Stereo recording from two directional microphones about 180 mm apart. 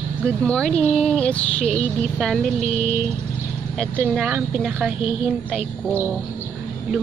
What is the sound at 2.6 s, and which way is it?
Speech, 40° left (ahead or behind).